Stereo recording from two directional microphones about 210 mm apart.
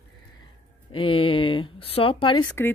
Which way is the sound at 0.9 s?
25° left (ahead or behind).